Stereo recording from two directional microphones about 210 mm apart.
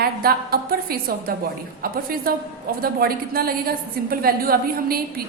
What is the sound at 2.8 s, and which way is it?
A woman's voice, 45° right (ahead or behind).